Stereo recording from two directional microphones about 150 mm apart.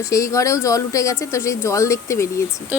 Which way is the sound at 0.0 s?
20° left (ahead or behind).